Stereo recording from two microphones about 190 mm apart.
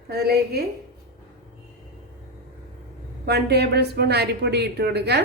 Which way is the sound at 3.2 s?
60° right (ahead or behind).